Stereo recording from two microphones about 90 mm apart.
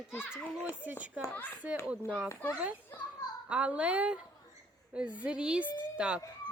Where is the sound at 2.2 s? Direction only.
35° left (ahead or behind).